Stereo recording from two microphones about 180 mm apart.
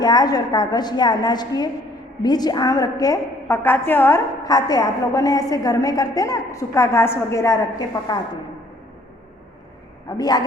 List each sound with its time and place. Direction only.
0.0 s a woman's voice: 20° left (ahead or behind)
10.1 s a woman's voice: 20° left (ahead or behind)